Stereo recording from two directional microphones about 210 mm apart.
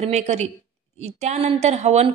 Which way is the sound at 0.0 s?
30° right (ahead or behind).